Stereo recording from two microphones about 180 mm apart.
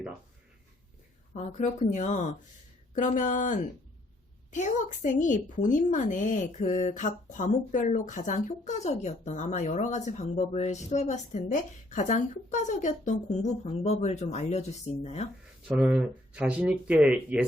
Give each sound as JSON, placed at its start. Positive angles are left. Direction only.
{"t": 1.3, "sound": "speech", "side_deg": 40}
{"t": 15.6, "sound": "speech", "side_deg": -5}